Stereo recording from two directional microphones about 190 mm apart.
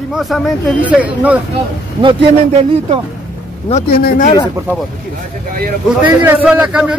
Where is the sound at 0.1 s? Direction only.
Centre (ahead or behind).